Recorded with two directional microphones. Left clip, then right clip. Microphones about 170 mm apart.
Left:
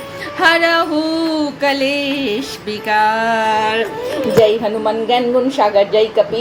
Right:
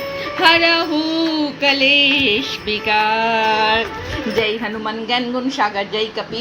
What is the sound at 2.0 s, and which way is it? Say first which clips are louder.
Music: right 5 dB; 60° left (ahead or behind).